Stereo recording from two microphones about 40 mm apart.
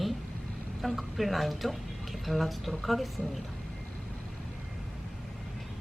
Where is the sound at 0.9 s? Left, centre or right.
Centre.